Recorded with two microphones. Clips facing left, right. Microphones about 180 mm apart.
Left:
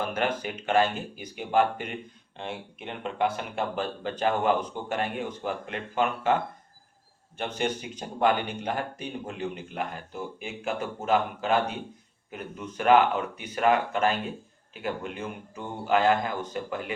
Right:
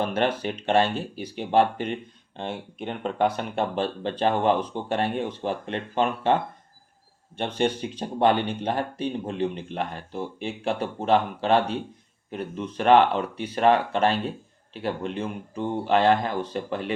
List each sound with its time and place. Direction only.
0.0 s speech: 35° right (ahead or behind)
7.3 s speech: 30° right (ahead or behind)